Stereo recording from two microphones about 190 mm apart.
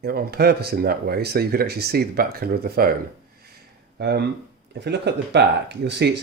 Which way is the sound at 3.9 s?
60° right (ahead or behind).